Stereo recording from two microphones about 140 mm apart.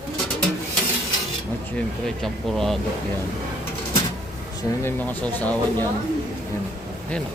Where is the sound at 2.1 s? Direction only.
5° left (ahead or behind).